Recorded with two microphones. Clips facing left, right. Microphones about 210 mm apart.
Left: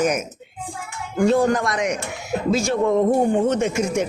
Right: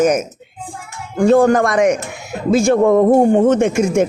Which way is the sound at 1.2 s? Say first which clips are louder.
Right 6 dB; 50° right (ahead or behind).